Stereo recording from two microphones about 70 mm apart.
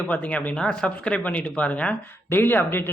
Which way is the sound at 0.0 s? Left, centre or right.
Left.